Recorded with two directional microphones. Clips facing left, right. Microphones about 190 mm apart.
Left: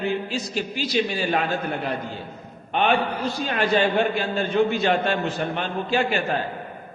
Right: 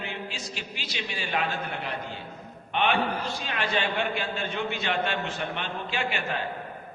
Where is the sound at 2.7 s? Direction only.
40° left (ahead or behind).